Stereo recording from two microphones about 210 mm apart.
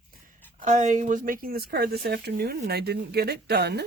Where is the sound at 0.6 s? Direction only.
35° right (ahead or behind); by 3.8 s 50° right (ahead or behind).